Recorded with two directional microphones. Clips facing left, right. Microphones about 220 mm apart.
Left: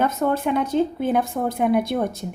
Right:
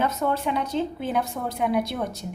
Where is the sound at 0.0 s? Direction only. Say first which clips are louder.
Left 4 dB; 50° left (ahead or behind).